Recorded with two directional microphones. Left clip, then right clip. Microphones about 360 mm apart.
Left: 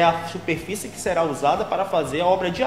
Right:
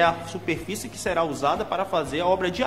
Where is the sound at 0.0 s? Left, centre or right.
Right.